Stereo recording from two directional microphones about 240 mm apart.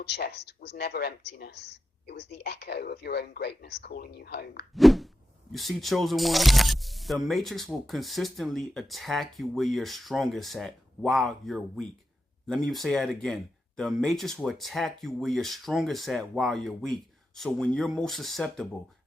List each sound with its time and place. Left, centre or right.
0.0 s speech: left
4.7 s speech: centre